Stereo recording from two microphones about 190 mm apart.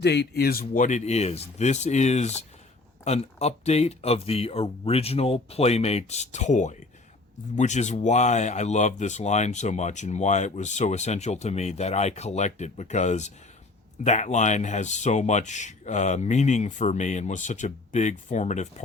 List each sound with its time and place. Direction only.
0.0 s speech: 60° left (ahead or behind)
0.6 s speech: 40° left (ahead or behind)